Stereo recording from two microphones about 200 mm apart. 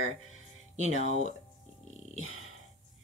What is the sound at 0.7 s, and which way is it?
Speech, 35° right (ahead or behind).